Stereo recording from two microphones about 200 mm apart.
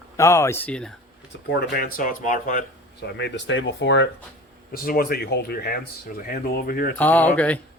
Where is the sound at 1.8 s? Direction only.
45° left (ahead or behind).